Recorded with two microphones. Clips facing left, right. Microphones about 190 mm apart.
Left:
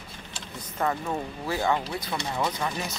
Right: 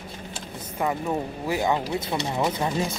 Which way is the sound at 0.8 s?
15° right (ahead or behind).